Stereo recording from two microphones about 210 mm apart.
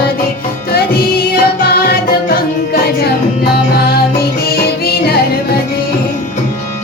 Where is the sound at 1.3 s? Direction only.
45° left (ahead or behind).